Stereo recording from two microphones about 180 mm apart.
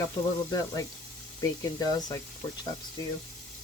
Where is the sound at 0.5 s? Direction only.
20° left (ahead or behind).